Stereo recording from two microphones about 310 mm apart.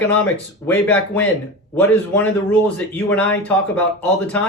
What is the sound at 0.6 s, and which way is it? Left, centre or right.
A man's voice, centre.